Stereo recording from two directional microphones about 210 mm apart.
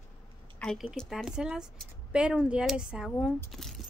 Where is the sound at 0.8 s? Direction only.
5° right (ahead or behind).